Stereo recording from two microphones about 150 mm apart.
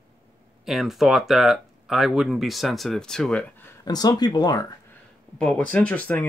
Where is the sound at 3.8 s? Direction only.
25° left (ahead or behind).